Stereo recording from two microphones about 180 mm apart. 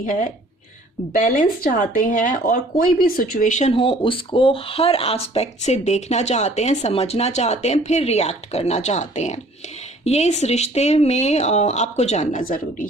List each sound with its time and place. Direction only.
0.0 s speech: 50° left (ahead or behind)